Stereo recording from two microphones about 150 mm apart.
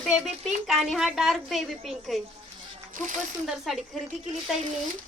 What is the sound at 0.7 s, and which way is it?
A woman's voice, centre (ahead or behind).